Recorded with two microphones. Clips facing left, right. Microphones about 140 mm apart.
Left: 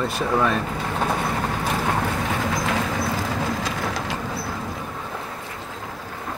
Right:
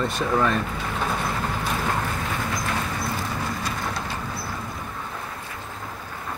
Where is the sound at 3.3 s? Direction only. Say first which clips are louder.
Left 3 dB; 90° left.